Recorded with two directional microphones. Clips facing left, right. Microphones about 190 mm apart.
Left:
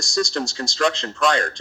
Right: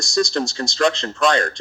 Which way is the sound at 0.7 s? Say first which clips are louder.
Right 3 dB; 10° left (ahead or behind).